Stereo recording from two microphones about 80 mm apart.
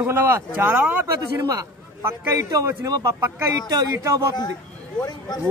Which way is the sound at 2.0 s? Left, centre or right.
Right.